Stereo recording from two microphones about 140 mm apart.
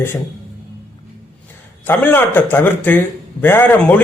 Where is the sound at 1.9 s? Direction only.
15° left (ahead or behind).